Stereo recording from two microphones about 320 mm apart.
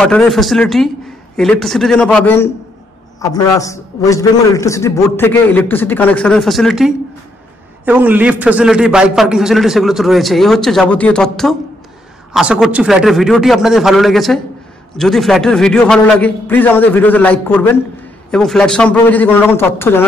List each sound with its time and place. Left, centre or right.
0.0 s a man's voice: centre